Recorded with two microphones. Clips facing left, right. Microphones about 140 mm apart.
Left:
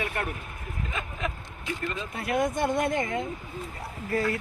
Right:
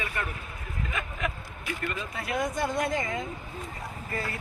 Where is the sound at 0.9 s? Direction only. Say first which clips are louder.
Even; 25° left (ahead or behind).